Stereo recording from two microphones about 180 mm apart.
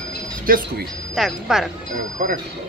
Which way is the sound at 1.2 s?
Centre (ahead or behind).